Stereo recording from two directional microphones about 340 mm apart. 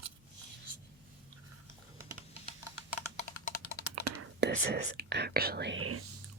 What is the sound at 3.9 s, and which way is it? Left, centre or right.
Computer keyboard, right.